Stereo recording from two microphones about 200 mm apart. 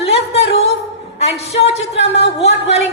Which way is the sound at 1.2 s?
30° left (ahead or behind).